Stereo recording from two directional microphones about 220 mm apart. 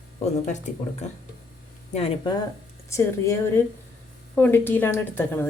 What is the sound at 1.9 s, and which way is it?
A woman's voice, 20° left (ahead or behind).